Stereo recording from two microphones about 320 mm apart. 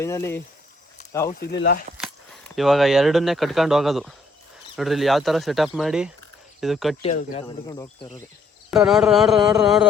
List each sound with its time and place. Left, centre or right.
0.0 s speech: centre
1.3 s speech: left
2.6 s speech: centre
7.0 s speech: centre
8.7 s speech: centre